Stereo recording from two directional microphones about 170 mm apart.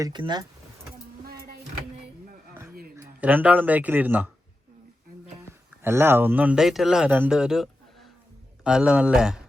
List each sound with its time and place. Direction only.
0.0 s speech: 25° right (ahead or behind)
1.2 s a sound: 65° right (ahead or behind)
3.2 s speech: 10° right (ahead or behind)
5.8 s speech: 15° right (ahead or behind)